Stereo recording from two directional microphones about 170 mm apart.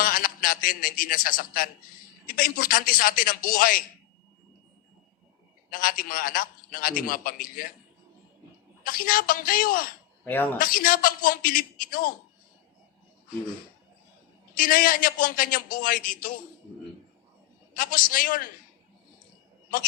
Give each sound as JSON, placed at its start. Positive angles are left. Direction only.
{"t": 0.0, "sound": "a man's voice", "side_deg": 55}
{"t": 5.7, "sound": "a man's voice", "side_deg": 55}
{"t": 8.8, "sound": "a man's voice", "side_deg": 55}
{"t": 14.5, "sound": "a man's voice", "side_deg": 55}
{"t": 17.7, "sound": "a man's voice", "side_deg": 55}